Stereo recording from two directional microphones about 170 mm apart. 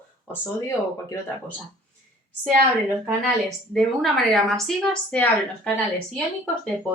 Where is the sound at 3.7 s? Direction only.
Centre (ahead or behind).